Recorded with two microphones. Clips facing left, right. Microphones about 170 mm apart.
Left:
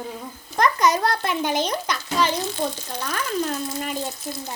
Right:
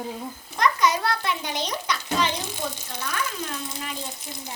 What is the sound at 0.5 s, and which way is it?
A child's voice, 45° left (ahead or behind).